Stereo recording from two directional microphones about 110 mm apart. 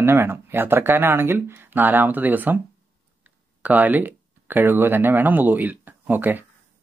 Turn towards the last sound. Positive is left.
turn(degrees=-15)  # may be behind; listen again after turning